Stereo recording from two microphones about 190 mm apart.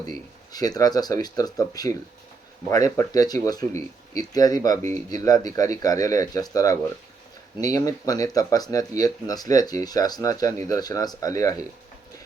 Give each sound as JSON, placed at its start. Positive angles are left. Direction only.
{"t": 0.5, "sound": "speech", "side_deg": 20}